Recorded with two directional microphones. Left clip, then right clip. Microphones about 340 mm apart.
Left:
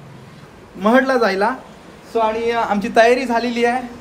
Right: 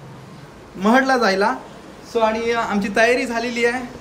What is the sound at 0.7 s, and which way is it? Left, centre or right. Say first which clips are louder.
A man's voice: left 2 dB; centre.